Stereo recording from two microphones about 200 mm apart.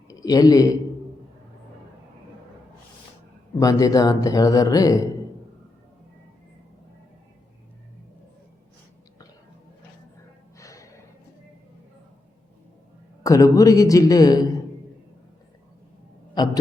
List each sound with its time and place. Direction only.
0.1 s a man's voice: 15° left (ahead or behind)
3.6 s speech: 15° left (ahead or behind)
10.6 s music: 15° left (ahead or behind)
13.2 s speech: 15° left (ahead or behind)
16.4 s a man's voice: 20° left (ahead or behind)